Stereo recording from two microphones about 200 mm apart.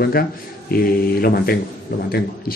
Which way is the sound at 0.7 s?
50° left (ahead or behind).